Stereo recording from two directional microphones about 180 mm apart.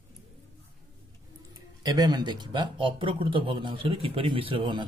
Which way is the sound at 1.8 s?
20° right (ahead or behind).